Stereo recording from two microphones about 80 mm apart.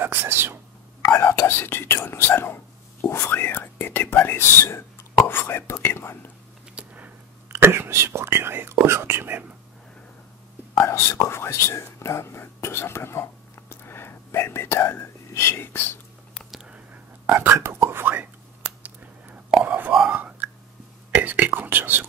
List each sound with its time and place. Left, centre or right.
0.0 s speech: right
1.0 s speech: left
6.7 s a sound: centre
7.4 s speech: right
10.7 s speech: left
16.4 s a sound: centre
16.7 s whispering: right